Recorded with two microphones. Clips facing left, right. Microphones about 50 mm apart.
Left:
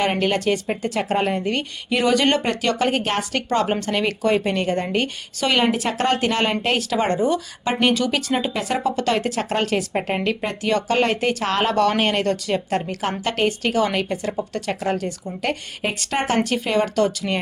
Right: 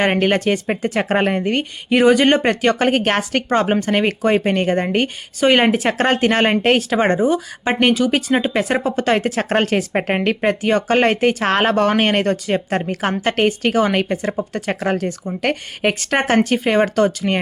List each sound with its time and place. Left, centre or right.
0.0 s a woman's voice: right
2.1 s speech: right
2.4 s a woman's voice: right
7.2 s speech: centre
7.6 s a woman's voice: right
10.6 s a woman's voice: right
16.4 s a woman's voice: right